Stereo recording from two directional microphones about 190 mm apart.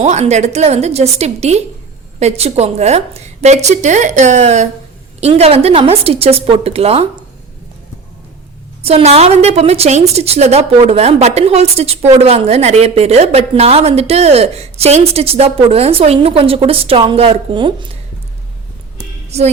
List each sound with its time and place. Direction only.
0.0 s a woman's voice: 35° right (ahead or behind)
8.8 s a woman's voice: 30° right (ahead or behind)
19.3 s a woman's voice: 35° right (ahead or behind)